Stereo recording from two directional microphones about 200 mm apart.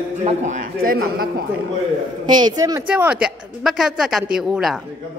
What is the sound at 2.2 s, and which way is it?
Speech, 20° right (ahead or behind).